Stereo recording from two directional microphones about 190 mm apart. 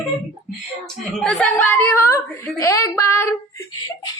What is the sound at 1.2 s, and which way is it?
Speech, 5° left (ahead or behind).